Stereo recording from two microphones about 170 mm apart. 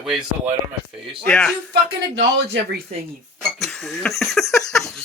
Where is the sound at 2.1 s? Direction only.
90° right.